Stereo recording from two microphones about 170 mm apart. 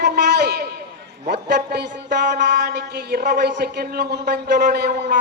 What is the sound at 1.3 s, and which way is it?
Speech, 75° right (ahead or behind).